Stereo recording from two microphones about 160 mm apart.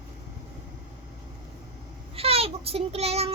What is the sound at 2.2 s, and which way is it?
Child singing, 40° right (ahead or behind).